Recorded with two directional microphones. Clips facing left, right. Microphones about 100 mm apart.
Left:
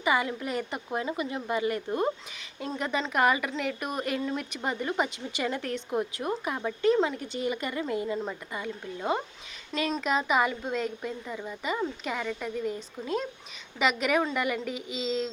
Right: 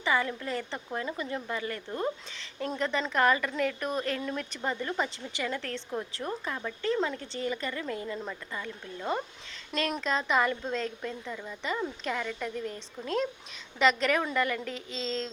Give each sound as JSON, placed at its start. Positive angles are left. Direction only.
{"t": 0.0, "sound": "speech", "side_deg": 15}